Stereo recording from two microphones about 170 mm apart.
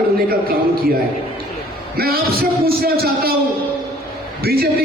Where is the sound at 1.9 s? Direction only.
60° right (ahead or behind).